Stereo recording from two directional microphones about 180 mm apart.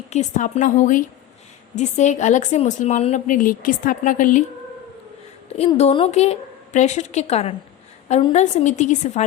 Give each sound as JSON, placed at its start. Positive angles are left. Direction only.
{"t": 0.1, "sound": "a woman's voice", "side_deg": 40}
{"t": 5.5, "sound": "a woman's voice", "side_deg": 35}